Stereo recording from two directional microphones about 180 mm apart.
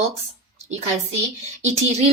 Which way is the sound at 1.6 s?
35° right (ahead or behind).